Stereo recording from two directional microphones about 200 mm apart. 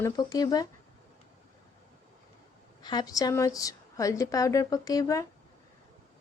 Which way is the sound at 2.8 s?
20° left (ahead or behind).